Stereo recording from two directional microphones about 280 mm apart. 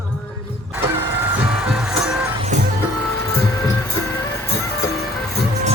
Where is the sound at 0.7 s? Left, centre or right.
Centre.